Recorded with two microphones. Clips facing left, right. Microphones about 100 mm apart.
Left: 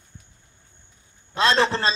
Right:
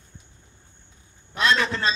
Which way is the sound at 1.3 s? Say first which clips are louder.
Left 3 dB; 30° left (ahead or behind).